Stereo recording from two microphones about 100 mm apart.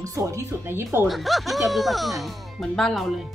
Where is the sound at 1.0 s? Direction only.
Centre (ahead or behind).